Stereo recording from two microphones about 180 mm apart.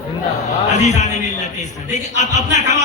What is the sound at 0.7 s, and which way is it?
A man's voice, 40° left (ahead or behind).